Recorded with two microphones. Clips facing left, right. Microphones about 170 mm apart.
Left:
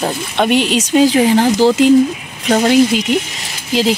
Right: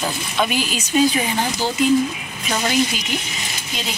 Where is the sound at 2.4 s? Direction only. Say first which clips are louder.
Left 10 dB; 70° left (ahead or behind).